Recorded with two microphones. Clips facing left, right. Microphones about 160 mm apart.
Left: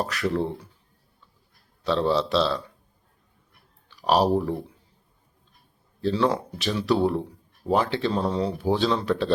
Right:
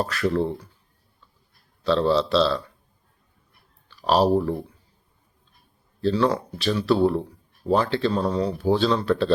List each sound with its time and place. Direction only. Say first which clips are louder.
0.0 s speech: right 2 dB; 15° left (ahead or behind)
1.8 s speech: right 3 dB; 15° left (ahead or behind)
3.8 s speech: right 1 dB; 15° left (ahead or behind)
6.0 s speech: right 2 dB; 20° left (ahead or behind)